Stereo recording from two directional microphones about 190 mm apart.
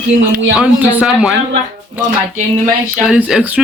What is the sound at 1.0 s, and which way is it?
Speech, 5° right (ahead or behind).